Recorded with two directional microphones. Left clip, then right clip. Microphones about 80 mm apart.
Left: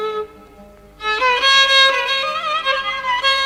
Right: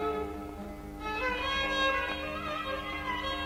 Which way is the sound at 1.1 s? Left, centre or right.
Left.